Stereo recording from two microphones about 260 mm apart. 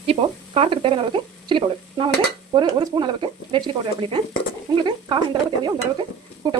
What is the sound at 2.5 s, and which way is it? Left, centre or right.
Stir, centre.